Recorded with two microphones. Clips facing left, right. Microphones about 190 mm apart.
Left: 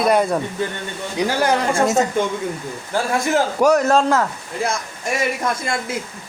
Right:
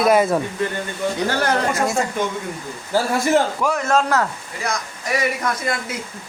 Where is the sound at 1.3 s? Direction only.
10° left (ahead or behind).